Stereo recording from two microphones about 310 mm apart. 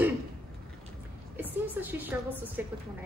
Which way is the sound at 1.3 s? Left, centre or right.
Centre.